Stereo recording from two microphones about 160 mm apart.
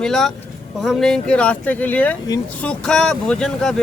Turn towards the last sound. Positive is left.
turn(degrees=5)  # may be behind; listen again after turning